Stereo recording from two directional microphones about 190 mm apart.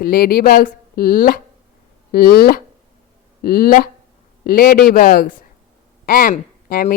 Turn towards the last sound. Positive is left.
turn(degrees=50)  # may be behind; listen again after turning